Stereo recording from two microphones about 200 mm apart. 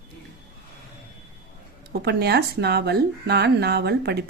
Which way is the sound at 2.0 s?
55° right (ahead or behind).